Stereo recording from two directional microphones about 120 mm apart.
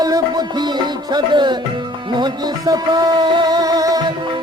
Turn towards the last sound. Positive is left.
turn(degrees=-30)  # may be behind; listen again after turning